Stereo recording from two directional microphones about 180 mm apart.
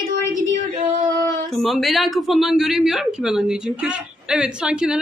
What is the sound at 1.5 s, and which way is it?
Speech, centre (ahead or behind).